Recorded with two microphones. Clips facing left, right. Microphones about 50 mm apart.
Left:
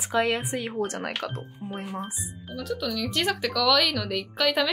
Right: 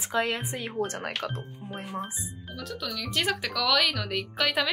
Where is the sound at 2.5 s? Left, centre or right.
Centre.